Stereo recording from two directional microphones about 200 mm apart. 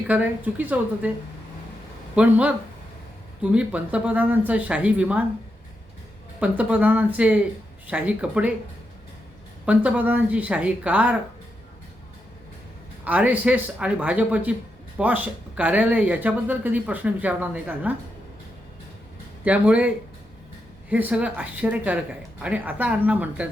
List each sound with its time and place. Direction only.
0.1 s speech: 5° right (ahead or behind)
2.1 s speech: 5° right (ahead or behind)
6.4 s speech: 5° right (ahead or behind)
9.6 s speech: 5° right (ahead or behind)
13.1 s speech: 5° right (ahead or behind)
19.5 s speech: 5° right (ahead or behind)
20.9 s speech: 5° right (ahead or behind)